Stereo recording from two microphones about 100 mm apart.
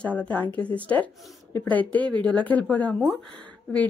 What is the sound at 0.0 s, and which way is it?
Speech, 15° left (ahead or behind).